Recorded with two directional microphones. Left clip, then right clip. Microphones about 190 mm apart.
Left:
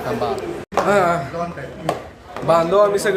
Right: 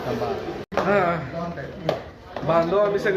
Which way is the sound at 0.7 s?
20° left (ahead or behind).